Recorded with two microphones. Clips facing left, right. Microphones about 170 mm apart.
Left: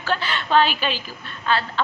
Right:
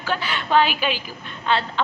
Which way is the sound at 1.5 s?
20° right (ahead or behind).